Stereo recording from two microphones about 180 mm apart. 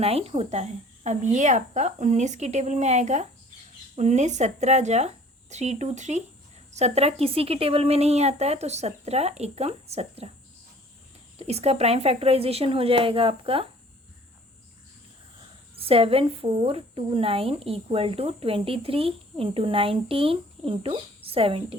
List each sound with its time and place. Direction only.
0.0 s a woman's voice: 35° right (ahead or behind)
11.3 s a woman's voice: 35° right (ahead or behind)
15.7 s a woman's voice: 30° right (ahead or behind)